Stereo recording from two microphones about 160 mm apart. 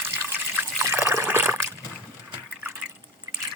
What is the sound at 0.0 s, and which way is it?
Water, 15° right (ahead or behind).